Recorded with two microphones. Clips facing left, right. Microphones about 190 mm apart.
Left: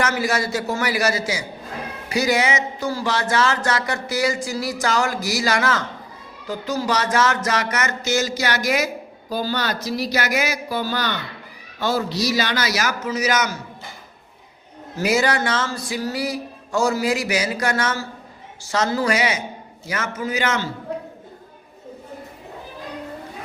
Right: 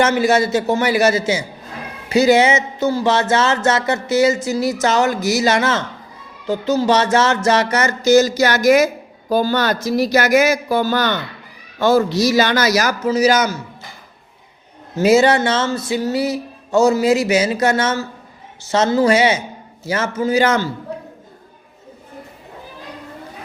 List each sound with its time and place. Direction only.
0.0 s music: 25° right (ahead or behind); by 8.9 s 45° right (ahead or behind)
9.3 s speech: 50° right (ahead or behind); by 13.6 s 30° right (ahead or behind)
14.9 s music: 25° right (ahead or behind)